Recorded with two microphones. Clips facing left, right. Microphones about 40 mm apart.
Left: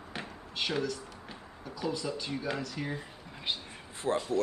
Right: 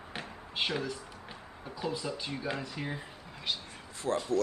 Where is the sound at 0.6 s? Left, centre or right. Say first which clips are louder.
Right 1 dB; right.